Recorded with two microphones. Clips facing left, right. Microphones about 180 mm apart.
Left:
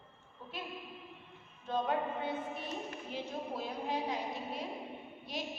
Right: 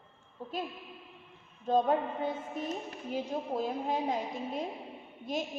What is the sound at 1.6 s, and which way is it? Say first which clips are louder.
A woman's voice: right 6 dB; 40° right (ahead or behind).